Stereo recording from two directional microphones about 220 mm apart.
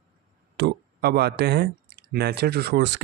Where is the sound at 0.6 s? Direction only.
45° right (ahead or behind).